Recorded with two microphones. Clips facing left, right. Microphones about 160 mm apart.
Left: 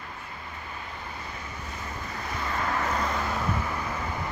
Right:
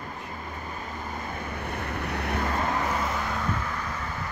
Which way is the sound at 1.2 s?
60° right (ahead or behind).